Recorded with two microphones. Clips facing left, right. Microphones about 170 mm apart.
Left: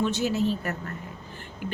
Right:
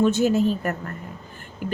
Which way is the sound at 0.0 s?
50° right (ahead or behind).